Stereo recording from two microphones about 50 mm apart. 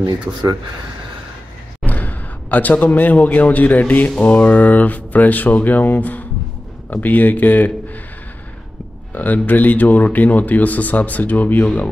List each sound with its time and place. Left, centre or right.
1.9 s a man's voice: left
9.1 s speech: left